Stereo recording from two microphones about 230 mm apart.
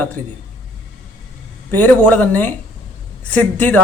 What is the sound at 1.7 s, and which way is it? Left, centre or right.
A man's voice, centre.